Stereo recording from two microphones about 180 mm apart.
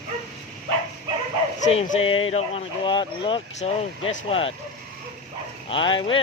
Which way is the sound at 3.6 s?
35° left (ahead or behind).